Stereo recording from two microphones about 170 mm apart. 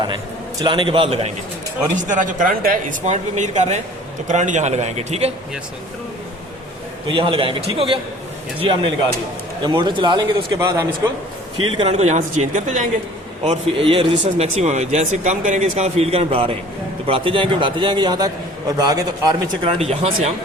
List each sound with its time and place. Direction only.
0.6 s speech: 30° right (ahead or behind)
2.0 s speech: 45° right (ahead or behind)
7.1 s speech: 30° right (ahead or behind)
11.8 s speech: 35° right (ahead or behind)
13.5 s speech: 30° right (ahead or behind)
19.8 s speech: 40° right (ahead or behind)